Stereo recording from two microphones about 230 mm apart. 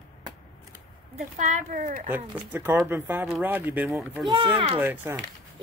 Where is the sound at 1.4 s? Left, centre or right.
Right.